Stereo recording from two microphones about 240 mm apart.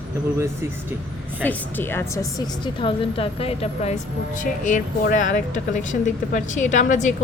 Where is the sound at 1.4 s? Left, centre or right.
Centre.